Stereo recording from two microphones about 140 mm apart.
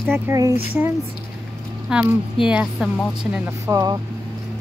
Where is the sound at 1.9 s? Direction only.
5° right (ahead or behind).